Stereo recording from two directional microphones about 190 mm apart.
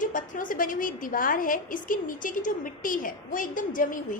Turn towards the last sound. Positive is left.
turn(degrees=45)  # may be behind; listen again after turning